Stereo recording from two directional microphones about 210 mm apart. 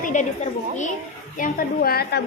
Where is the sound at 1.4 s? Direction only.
40° left (ahead or behind).